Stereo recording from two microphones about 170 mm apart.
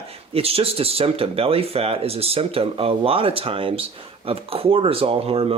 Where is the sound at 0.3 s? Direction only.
35° right (ahead or behind).